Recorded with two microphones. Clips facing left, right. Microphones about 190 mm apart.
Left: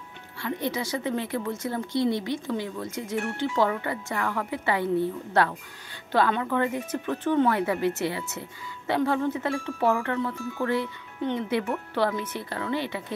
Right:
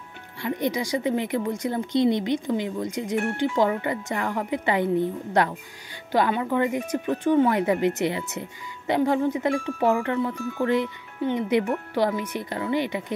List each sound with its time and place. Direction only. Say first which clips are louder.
0.4 s speech: right 3 dB; 15° right (ahead or behind)